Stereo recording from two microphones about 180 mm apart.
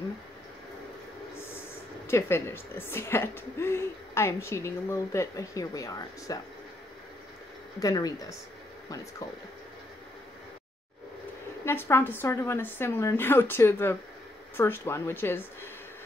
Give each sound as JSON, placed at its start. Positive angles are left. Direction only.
{"t": 2.0, "sound": "speech", "side_deg": 15}
{"t": 7.8, "sound": "speech", "side_deg": 20}
{"t": 11.6, "sound": "speech", "side_deg": 15}